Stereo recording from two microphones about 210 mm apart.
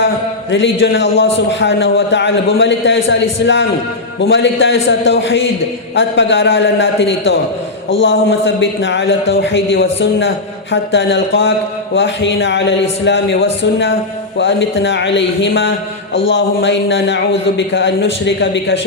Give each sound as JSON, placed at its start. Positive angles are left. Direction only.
{"t": 0.5, "sound": "speech", "side_deg": 60}